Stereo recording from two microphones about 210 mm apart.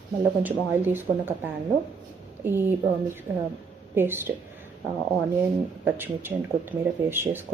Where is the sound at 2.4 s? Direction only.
10° right (ahead or behind).